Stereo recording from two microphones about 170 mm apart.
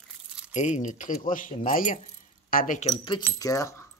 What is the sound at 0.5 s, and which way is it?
Speech, 45° left (ahead or behind).